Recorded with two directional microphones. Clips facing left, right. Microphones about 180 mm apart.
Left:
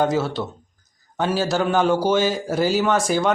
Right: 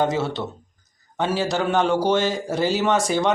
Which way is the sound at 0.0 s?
Centre (ahead or behind).